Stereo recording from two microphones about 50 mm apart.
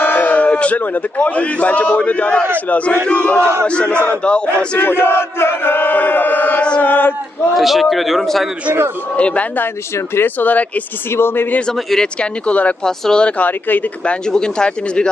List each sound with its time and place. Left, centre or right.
0.0 s speech: left
3.1 s battle cry: left
4.8 s chant: left
6.6 s chant: left
6.8 s speech: left
7.5 s a man's voice: centre
9.1 s battle cry: left
10.2 s speech: left
11.1 s chant: left
12.2 s battle cry: left
12.8 s speech: centre
13.4 s speech: left
14.0 s speech: centre